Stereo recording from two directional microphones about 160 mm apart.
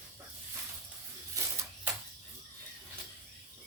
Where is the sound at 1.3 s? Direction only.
15° right (ahead or behind).